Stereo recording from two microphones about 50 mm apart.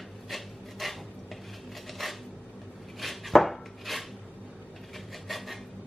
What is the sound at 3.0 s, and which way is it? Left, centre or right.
Chopping, centre.